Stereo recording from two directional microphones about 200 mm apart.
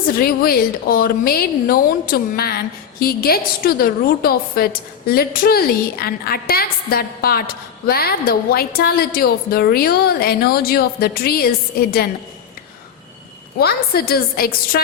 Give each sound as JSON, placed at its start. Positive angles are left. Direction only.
{"t": 0.2, "sound": "a woman's voice", "side_deg": 50}
{"t": 13.6, "sound": "a woman's voice", "side_deg": 50}